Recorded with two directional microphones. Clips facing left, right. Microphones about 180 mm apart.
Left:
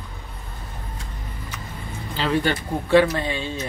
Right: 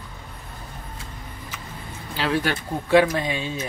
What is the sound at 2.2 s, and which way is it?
Speech, 5° right (ahead or behind).